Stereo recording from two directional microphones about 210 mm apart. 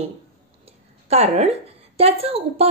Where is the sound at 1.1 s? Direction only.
30° right (ahead or behind).